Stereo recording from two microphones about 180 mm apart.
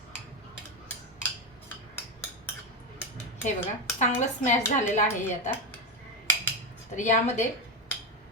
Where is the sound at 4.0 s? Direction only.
40° left (ahead or behind).